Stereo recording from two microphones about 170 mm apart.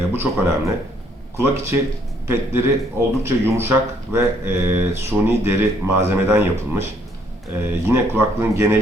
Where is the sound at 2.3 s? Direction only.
15° right (ahead or behind).